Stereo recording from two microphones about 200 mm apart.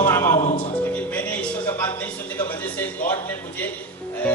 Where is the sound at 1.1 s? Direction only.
5° left (ahead or behind).